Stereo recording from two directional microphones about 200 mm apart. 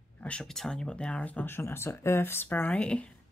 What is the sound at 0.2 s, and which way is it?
Speech, 5° left (ahead or behind).